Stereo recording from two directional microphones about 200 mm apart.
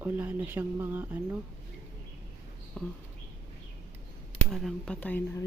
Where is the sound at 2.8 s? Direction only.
5° left (ahead or behind).